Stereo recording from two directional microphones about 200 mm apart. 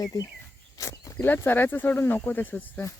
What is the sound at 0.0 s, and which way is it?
Speech, 15° left (ahead or behind).